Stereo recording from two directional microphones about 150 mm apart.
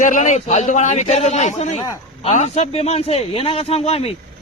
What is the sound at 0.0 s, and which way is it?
A man's voice, 55° left (ahead or behind).